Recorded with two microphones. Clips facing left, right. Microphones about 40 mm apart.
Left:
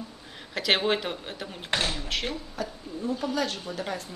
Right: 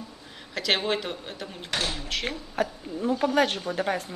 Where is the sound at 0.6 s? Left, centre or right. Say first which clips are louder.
Left 1 dB; centre.